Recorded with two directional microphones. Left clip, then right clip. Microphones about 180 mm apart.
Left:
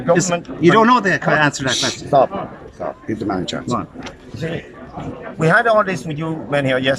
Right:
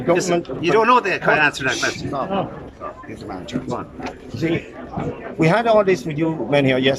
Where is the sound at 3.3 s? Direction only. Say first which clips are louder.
Left 1 dB; 60° left (ahead or behind).